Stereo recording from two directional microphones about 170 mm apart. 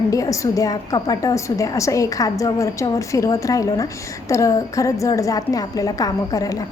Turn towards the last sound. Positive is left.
turn(degrees=20)  # may be behind; listen again after turning